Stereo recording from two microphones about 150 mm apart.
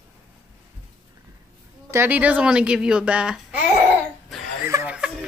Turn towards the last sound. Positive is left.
turn(degrees=-10)  # may be behind; listen again after turning